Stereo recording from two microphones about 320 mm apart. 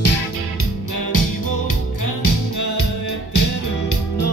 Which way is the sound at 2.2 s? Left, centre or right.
Left.